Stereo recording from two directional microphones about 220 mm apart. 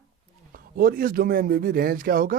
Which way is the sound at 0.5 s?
40° right (ahead or behind).